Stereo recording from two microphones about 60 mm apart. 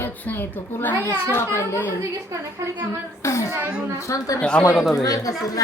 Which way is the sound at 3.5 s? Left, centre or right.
Right.